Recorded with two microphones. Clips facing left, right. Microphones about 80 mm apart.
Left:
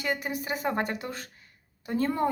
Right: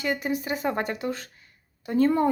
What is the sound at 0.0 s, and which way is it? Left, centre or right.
Speech, right.